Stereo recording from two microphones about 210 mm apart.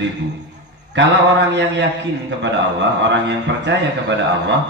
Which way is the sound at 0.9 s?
55° right (ahead or behind).